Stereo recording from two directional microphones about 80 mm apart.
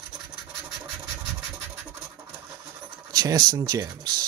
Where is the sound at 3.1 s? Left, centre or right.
Right.